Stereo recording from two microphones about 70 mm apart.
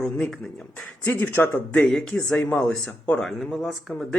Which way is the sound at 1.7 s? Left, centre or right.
Centre.